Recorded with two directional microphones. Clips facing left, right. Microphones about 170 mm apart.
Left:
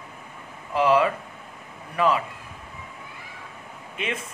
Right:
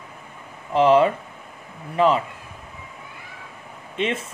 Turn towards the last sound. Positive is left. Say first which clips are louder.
# right 6 dB
turn(degrees=-30)  # may be behind; listen again after turning